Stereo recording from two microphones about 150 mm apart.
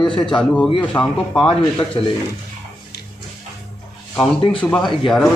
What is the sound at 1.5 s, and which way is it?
Speech, 35° left (ahead or behind).